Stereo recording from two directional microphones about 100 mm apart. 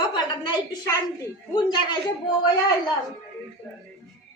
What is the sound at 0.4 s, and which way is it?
A woman's voice, 40° left (ahead or behind).